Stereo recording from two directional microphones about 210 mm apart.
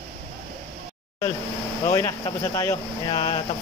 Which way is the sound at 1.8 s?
15° left (ahead or behind).